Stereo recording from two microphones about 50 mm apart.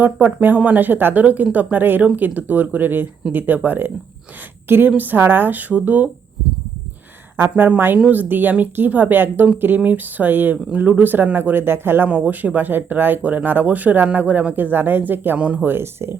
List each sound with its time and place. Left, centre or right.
0.0 s speech: right
8.1 s speech: right
12.0 s speech: right
15.4 s speech: right
15.6 s speech: right